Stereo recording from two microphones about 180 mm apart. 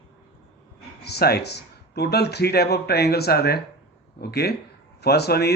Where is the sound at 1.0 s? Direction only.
65° left (ahead or behind).